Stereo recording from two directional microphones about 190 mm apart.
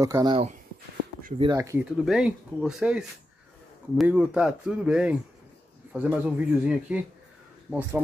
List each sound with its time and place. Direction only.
0.0 s speech: 20° right (ahead or behind)
1.4 s a man's voice: 20° right (ahead or behind)
1.9 s a man's voice: 5° right (ahead or behind)